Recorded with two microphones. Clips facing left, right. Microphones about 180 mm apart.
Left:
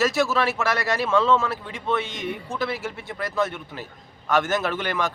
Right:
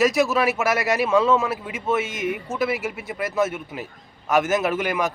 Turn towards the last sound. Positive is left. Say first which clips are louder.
# right 3 dB
turn(degrees=0)  # may be behind; listen again after turning